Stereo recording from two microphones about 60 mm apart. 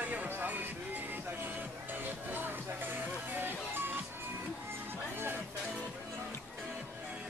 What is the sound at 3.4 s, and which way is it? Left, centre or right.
Music, right.